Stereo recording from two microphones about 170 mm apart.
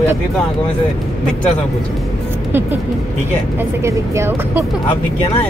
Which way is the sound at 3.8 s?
15° right (ahead or behind).